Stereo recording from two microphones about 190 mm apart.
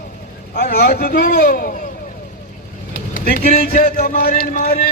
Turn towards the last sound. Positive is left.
turn(degrees=50)  # may be behind; listen again after turning